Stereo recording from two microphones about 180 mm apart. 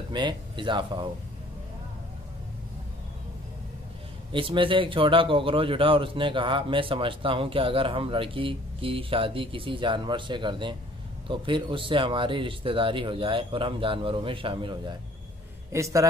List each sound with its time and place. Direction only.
0.1 s speech: 25° right (ahead or behind)
4.3 s a man's voice: 30° right (ahead or behind)
15.7 s a man's voice: 15° right (ahead or behind)